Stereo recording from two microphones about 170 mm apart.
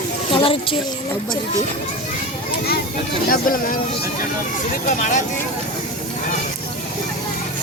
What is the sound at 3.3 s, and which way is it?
Speech, 55° left (ahead or behind).